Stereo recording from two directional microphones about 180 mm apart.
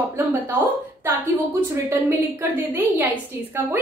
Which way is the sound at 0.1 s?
15° right (ahead or behind).